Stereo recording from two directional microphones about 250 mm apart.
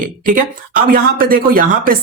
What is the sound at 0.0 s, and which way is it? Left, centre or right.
Speech, right.